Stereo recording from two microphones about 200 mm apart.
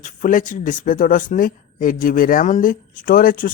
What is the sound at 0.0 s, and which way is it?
Speech, 40° left (ahead or behind).